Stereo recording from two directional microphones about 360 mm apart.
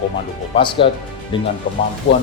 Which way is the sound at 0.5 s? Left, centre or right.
Centre.